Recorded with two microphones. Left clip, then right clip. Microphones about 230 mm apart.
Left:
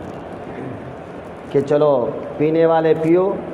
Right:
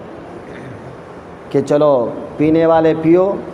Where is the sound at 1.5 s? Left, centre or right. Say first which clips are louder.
Right 3 dB; right.